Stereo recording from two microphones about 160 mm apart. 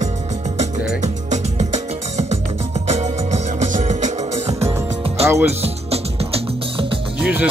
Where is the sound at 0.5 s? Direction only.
45° right (ahead or behind).